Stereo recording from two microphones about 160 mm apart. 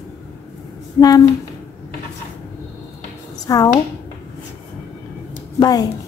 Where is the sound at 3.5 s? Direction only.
20° left (ahead or behind).